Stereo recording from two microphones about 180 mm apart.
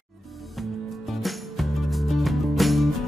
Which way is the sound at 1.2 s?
Centre (ahead or behind).